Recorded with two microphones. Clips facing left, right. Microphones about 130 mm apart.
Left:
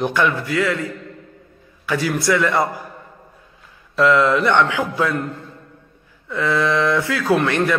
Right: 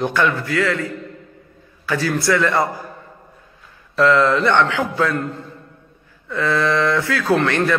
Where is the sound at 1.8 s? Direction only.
15° left (ahead or behind).